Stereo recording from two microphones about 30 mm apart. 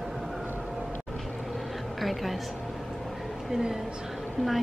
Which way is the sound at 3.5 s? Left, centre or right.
Centre.